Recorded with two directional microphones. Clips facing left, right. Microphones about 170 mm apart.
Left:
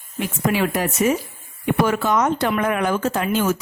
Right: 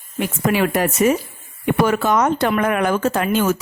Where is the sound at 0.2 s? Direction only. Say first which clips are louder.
Right 2 dB; 60° right (ahead or behind).